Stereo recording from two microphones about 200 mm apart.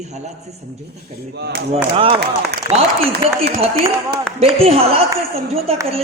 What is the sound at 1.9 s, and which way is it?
Speech, 25° right (ahead or behind).